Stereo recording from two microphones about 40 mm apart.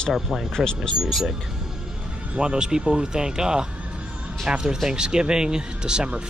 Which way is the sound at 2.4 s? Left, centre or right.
Right.